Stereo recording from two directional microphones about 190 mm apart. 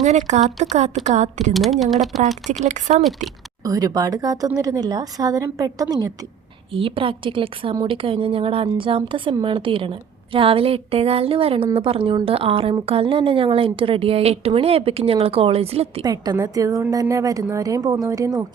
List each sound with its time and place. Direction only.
0.0 s speech: 40° right (ahead or behind)
1.5 s speech: centre (ahead or behind)
2.6 s speech: 40° right (ahead or behind)
3.0 s speech: centre (ahead or behind)
3.6 s a woman's voice: 20° right (ahead or behind)
16.0 s a woman's voice: 20° right (ahead or behind)